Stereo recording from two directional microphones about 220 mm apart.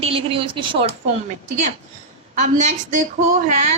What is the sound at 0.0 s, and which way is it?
Speech, 25° right (ahead or behind).